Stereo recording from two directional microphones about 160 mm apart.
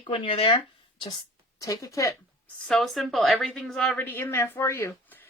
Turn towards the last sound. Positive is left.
turn(degrees=15)  # may be behind; listen again after turning